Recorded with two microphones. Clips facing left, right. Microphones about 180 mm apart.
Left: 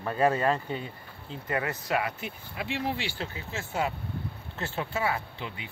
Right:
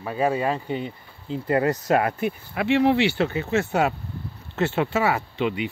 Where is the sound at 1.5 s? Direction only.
40° right (ahead or behind).